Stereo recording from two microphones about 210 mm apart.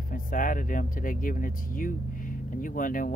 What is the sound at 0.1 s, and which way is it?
Speech, 40° left (ahead or behind).